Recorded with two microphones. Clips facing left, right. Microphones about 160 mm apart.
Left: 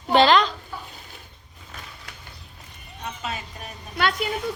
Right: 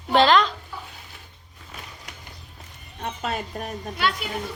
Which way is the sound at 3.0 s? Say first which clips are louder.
Right 4 dB; 50° right (ahead or behind).